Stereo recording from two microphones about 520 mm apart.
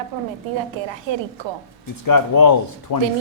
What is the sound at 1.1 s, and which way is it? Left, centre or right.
Speech, right.